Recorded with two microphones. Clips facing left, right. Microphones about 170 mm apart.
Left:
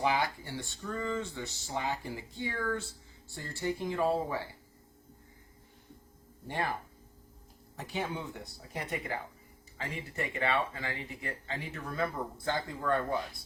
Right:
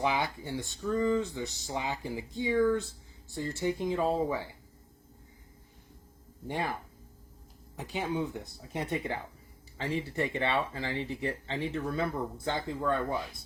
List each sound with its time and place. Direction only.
0.1 s speech: 20° right (ahead or behind)
6.5 s speech: 15° right (ahead or behind)
7.8 s speech: 15° right (ahead or behind)